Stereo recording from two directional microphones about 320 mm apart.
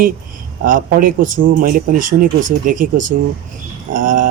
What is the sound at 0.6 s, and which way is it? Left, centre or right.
A man's voice, right.